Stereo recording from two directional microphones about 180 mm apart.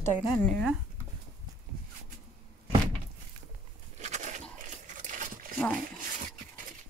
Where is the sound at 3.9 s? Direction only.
40° right (ahead or behind).